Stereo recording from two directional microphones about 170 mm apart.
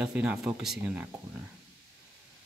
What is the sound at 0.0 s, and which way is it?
Speech, 5° right (ahead or behind).